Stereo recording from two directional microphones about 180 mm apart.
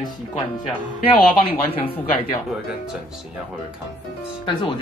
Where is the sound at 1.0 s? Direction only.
30° left (ahead or behind).